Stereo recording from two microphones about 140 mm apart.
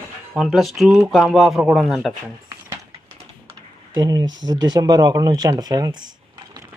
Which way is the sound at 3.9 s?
30° right (ahead or behind).